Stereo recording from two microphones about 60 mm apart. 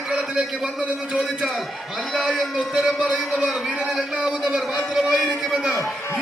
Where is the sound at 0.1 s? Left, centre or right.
Centre.